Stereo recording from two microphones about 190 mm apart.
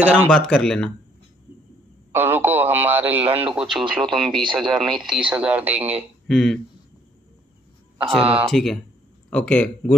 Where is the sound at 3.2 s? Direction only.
30° right (ahead or behind).